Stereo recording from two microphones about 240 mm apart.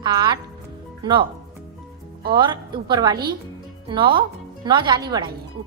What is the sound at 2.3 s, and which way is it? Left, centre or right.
Speech, centre.